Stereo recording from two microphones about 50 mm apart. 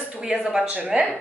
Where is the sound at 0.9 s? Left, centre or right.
Right.